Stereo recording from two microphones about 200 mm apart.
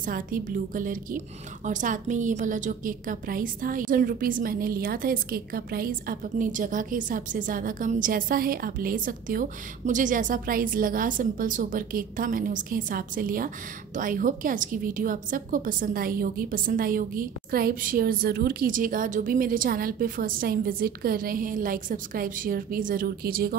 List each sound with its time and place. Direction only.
0.0 s a woman's voice: 45° right (ahead or behind)